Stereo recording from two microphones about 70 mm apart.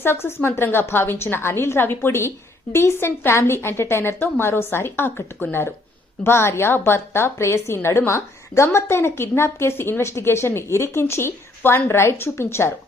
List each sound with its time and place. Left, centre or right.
0.0 s a woman's voice: left